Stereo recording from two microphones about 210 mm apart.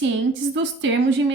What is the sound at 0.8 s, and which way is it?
Speech, 60° right (ahead or behind).